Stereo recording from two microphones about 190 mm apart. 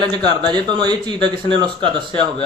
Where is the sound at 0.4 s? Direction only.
25° right (ahead or behind).